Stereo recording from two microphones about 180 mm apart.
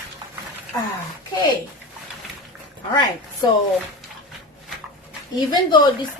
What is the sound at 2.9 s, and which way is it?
Speech, 25° left (ahead or behind).